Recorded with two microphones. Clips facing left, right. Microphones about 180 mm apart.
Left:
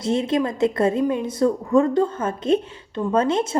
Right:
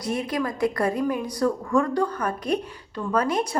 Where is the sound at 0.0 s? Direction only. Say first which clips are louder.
Left 5 dB; 25° left (ahead or behind).